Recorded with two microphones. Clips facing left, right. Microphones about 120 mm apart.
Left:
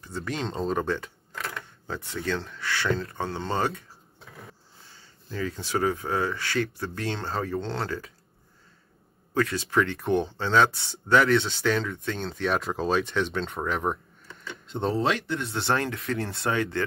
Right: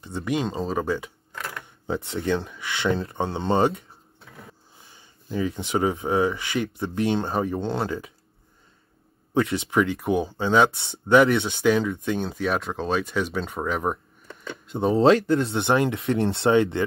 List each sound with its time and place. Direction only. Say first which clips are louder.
0.0 s speech: right 5 dB; 15° right (ahead or behind); by 1.6 s centre (ahead or behind)
1.6 s speech: right 7 dB; 20° right (ahead or behind)
9.3 s speech: right 2 dB; 20° right (ahead or behind); by 13.9 s 5° right (ahead or behind)
14.2 s a sound: right 4 dB; 55° right (ahead or behind)
14.7 s speech: right 5 dB; 10° right (ahead or behind)
15.0 s speech: right 13 dB; 35° right (ahead or behind)
15.4 s speech: right 5 dB; 20° right (ahead or behind)